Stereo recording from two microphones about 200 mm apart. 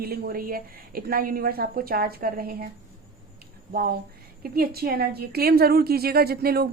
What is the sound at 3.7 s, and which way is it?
A woman's voice, 50° right (ahead or behind).